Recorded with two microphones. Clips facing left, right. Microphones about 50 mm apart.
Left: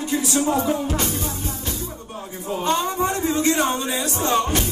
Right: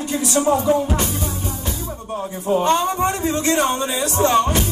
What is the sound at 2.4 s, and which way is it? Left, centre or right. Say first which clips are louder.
Music: right 6 dB; right.